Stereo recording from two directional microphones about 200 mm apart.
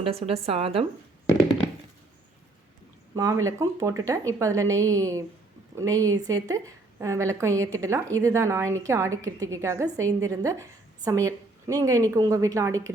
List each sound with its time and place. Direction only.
0.0 s a woman's voice: 30° right (ahead or behind)
3.2 s a woman's voice: 15° right (ahead or behind)